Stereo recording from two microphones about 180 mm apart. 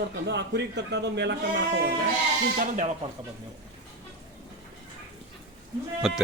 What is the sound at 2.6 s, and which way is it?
Speech, 45° right (ahead or behind).